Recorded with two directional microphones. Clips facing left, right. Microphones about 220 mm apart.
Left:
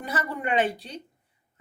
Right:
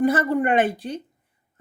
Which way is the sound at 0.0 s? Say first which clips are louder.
Right 11 dB; 50° right (ahead or behind).